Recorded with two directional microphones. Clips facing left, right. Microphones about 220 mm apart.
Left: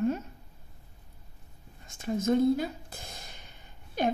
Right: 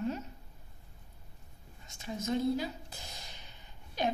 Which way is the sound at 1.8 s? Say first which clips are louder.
Left 9 dB; 50° left (ahead or behind).